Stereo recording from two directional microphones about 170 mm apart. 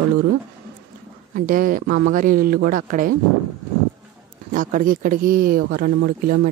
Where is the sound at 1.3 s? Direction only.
55° right (ahead or behind).